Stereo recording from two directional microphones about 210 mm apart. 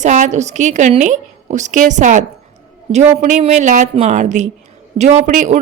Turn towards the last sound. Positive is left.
turn(degrees=-35)  # may be behind; listen again after turning